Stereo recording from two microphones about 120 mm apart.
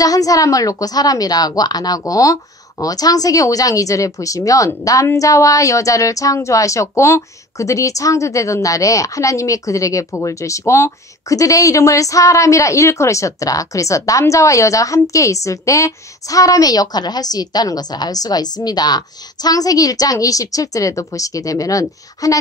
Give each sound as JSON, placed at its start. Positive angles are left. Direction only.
{"t": 0.0, "sound": "a woman's voice", "side_deg": 30}